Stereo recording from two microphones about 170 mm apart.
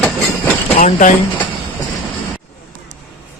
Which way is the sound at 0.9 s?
45° left (ahead or behind).